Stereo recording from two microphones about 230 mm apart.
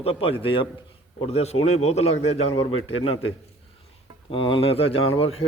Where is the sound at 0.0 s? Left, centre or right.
Left.